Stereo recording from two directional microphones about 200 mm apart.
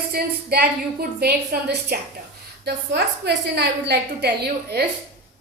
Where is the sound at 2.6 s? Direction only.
55° right (ahead or behind).